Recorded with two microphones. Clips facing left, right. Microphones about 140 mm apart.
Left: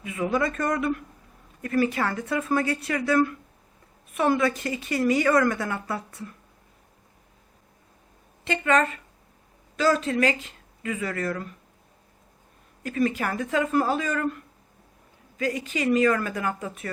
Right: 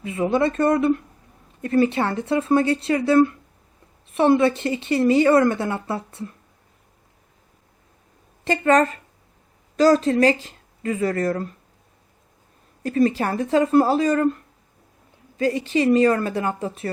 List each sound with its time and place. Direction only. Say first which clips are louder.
0.0 s a woman's voice: right 5 dB; 30° right (ahead or behind)
8.4 s speech: right 5 dB; 40° right (ahead or behind)
12.8 s speech: right 6 dB; 35° right (ahead or behind)